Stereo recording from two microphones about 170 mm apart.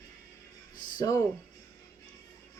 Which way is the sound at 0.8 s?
50° left (ahead or behind).